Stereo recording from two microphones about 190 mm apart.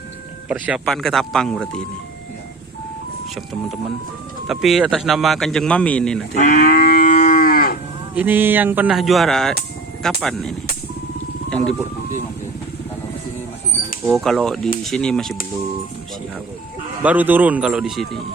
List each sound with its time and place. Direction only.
0.4 s speech: 5° right (ahead or behind)
3.5 s speech: centre (ahead or behind)
6.3 s moo: 40° left (ahead or behind)
8.1 s speech: 10° right (ahead or behind)
11.4 s music: 5° left (ahead or behind)
14.0 s speech: centre (ahead or behind)
17.0 s speech: 10° right (ahead or behind)